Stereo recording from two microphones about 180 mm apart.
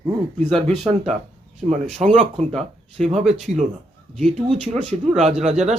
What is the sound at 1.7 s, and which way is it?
Speech, 40° right (ahead or behind).